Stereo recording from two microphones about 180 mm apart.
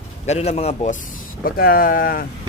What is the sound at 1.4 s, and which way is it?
Speech, 55° left (ahead or behind).